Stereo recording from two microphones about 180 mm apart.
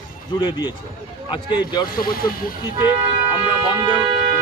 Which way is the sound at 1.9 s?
55° left (ahead or behind).